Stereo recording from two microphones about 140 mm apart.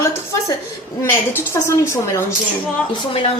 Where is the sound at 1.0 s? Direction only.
15° left (ahead or behind).